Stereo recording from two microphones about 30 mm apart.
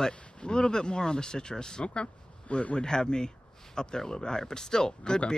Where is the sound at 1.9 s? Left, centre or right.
Left.